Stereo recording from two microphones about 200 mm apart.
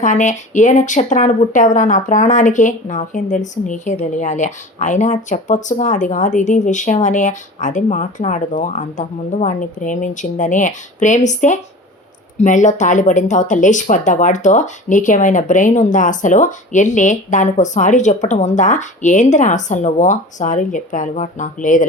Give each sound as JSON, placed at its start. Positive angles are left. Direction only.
{"t": 0.0, "sound": "speech", "side_deg": 40}